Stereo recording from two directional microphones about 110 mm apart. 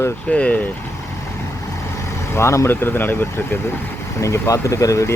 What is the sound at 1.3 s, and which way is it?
Speech, 25° left (ahead or behind).